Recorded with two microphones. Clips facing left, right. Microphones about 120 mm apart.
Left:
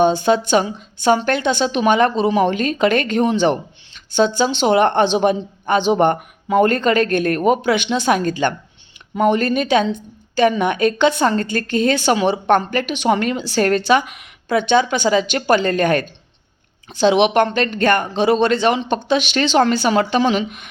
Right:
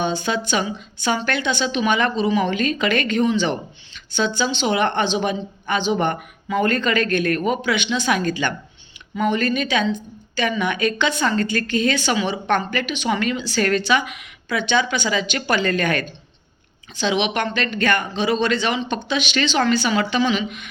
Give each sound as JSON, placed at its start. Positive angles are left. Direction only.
{"t": 0.0, "sound": "speech", "side_deg": 45}